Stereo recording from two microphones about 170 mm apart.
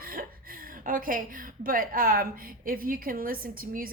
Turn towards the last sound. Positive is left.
turn(degrees=-55)  # may be behind; listen again after turning